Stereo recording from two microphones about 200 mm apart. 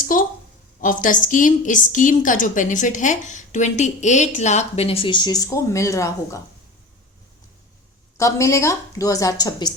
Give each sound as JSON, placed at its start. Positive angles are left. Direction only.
{"t": 0.0, "sound": "a woman's voice", "side_deg": 45}
{"t": 8.2, "sound": "a woman's voice", "side_deg": 15}